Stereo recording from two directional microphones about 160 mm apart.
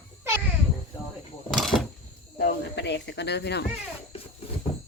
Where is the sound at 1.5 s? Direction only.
Centre (ahead or behind).